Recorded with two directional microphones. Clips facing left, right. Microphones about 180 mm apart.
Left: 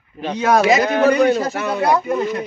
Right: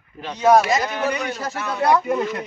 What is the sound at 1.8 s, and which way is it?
Speech, 5° left (ahead or behind).